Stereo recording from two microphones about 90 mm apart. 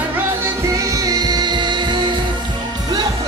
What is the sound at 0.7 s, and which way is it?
Music, 40° right (ahead or behind).